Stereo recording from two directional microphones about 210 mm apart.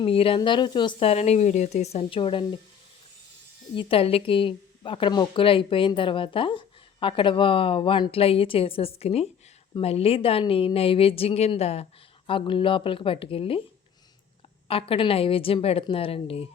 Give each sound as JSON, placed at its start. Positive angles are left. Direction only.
{"t": 0.0, "sound": "a woman's voice", "side_deg": 25}
{"t": 3.8, "sound": "a woman's voice", "side_deg": 25}
{"t": 14.7, "sound": "a woman's voice", "side_deg": 25}